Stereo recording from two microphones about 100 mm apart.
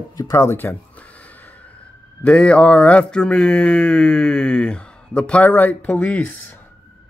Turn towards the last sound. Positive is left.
turn(degrees=15)  # may be behind; listen again after turning